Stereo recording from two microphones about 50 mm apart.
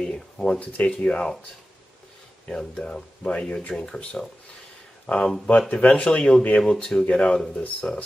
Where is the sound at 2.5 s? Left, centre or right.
Centre.